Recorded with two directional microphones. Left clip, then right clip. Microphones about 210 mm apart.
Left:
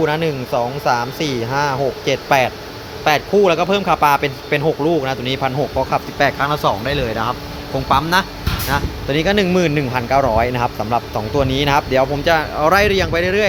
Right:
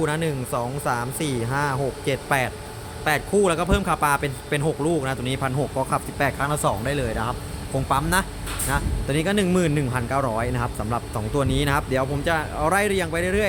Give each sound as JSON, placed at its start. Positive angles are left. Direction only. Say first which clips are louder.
{"t": 0.0, "sound": "speech", "louder": "left 7 dB", "side_deg": 0}